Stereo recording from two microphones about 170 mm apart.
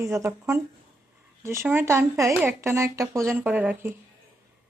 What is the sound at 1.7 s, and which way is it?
Speech, 15° right (ahead or behind).